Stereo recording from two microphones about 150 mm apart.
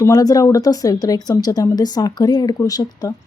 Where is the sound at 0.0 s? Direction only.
25° left (ahead or behind).